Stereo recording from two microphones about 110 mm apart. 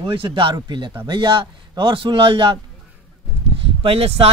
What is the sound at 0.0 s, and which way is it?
A man's voice, 50° right (ahead or behind).